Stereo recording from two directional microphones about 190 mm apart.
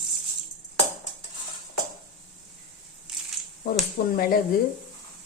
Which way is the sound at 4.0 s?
55° left (ahead or behind).